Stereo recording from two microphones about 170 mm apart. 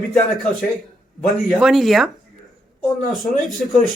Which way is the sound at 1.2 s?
Centre (ahead or behind).